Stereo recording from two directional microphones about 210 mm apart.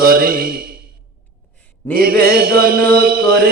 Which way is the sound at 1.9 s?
45° right (ahead or behind).